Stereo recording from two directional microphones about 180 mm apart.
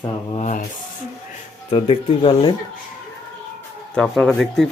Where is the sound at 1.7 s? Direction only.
30° left (ahead or behind).